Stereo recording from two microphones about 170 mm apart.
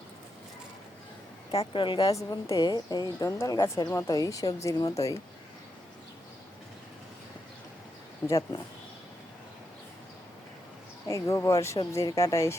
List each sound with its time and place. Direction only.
1.5 s a woman's voice: 35° left (ahead or behind)
8.3 s a woman's voice: 20° left (ahead or behind)
11.1 s speech: 20° left (ahead or behind)